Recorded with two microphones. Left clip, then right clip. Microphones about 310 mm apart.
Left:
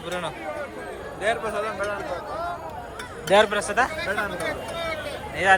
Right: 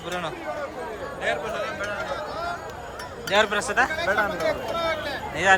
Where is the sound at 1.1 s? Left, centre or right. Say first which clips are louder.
Left 2 dB; centre.